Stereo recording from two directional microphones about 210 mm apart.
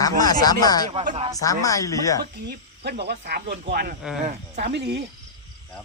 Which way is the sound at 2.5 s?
50° right (ahead or behind).